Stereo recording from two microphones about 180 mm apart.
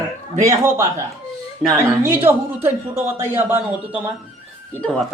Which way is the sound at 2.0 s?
10° right (ahead or behind).